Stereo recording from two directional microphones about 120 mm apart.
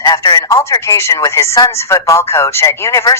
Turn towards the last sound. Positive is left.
turn(degrees=25)  # may be behind; listen again after turning